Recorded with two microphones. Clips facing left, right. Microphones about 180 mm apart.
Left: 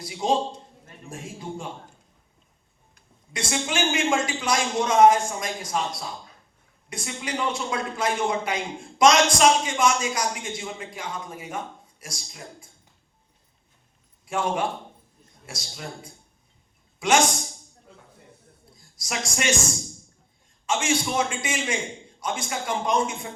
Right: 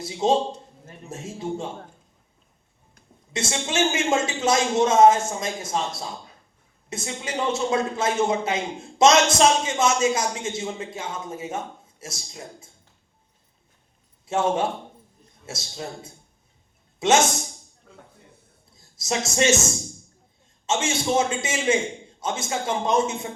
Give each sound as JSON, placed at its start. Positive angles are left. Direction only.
{"t": 0.0, "sound": "a man's voice", "side_deg": -25}
{"t": 3.3, "sound": "a man's voice", "side_deg": -25}
{"t": 14.3, "sound": "a man's voice", "side_deg": -25}
{"t": 17.0, "sound": "a man's voice", "side_deg": -25}
{"t": 18.8, "sound": "a woman's voice", "side_deg": -25}
{"t": 20.7, "sound": "a man's voice", "side_deg": -25}